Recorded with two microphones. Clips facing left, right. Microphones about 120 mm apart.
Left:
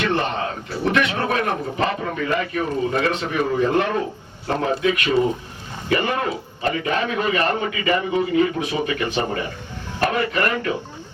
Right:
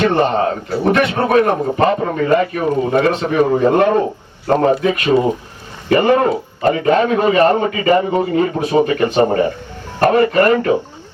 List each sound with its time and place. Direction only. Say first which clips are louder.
0.0 s a man's voice: right 8 dB; 45° right (ahead or behind)